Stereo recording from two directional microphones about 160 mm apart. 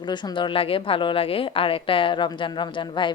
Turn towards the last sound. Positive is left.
turn(degrees=30)  # may be behind; listen again after turning